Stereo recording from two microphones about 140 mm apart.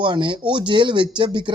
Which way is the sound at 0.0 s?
35° right (ahead or behind).